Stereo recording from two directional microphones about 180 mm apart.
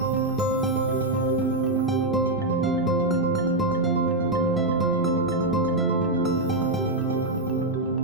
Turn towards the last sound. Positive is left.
turn(degrees=0)  # may be behind; listen again after turning